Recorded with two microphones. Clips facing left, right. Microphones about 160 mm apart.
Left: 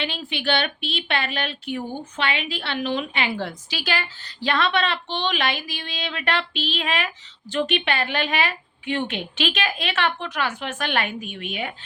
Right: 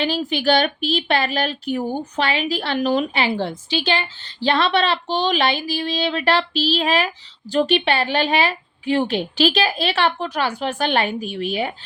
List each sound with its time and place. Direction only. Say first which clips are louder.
0.0 s speech: right 7 dB; 40° right (ahead or behind)